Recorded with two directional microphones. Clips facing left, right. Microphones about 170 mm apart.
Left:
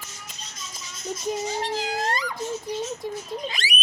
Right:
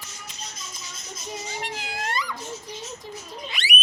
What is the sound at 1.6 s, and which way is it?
Cat, 40° left (ahead or behind).